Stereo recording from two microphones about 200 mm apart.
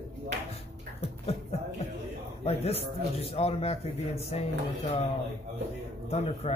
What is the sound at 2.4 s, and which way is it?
Speech, 30° left (ahead or behind).